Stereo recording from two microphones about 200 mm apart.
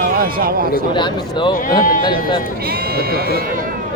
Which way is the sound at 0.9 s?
25° left (ahead or behind).